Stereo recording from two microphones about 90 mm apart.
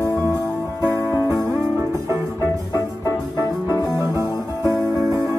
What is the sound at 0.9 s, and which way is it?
Music, 30° right (ahead or behind).